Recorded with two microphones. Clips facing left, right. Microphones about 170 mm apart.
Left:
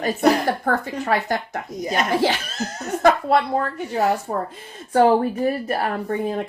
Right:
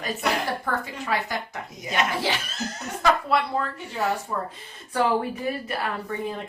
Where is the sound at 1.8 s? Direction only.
40° left (ahead or behind).